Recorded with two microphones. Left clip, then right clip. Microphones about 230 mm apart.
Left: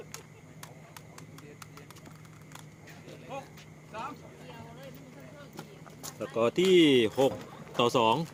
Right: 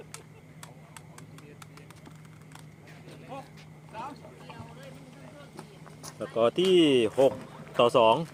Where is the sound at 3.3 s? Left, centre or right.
Centre.